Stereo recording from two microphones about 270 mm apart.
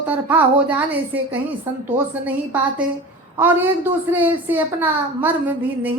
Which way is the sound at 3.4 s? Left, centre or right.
Centre.